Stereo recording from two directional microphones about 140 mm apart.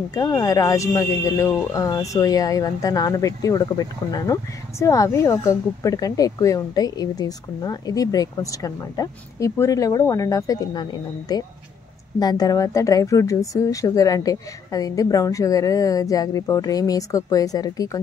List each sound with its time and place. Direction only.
0.1 s speech: 25° left (ahead or behind)